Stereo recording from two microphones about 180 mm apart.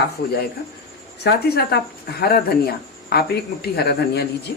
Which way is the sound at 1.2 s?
65° left (ahead or behind).